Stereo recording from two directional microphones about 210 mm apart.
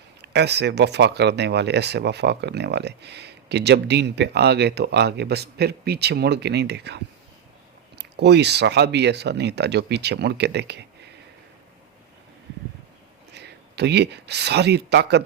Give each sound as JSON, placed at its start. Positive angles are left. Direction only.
{"t": 0.2, "sound": "speech", "side_deg": -55}
{"t": 13.3, "sound": "speech", "side_deg": -55}